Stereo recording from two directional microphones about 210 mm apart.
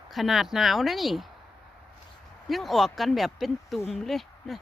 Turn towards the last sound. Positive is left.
turn(degrees=0)  # may be behind; listen again after turning